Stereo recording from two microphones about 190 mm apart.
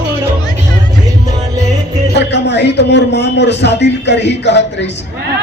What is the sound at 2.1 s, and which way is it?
A man's voice, 65° left (ahead or behind).